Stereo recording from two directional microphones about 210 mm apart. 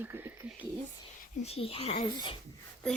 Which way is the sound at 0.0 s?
10° right (ahead or behind).